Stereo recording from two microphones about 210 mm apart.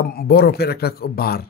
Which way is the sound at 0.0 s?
45° left (ahead or behind).